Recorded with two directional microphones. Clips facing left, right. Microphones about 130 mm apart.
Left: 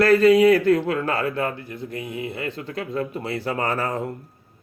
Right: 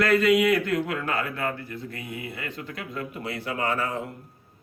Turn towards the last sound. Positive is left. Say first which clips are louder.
# left 3 dB
turn(degrees=40)  # may be behind; listen again after turning